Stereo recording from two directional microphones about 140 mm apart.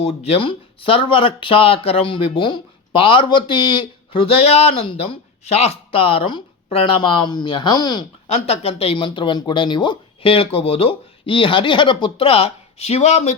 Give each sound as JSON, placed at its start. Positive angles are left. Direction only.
{"t": 0.2, "sound": "speech", "side_deg": 45}
{"t": 8.3, "sound": "speech", "side_deg": 45}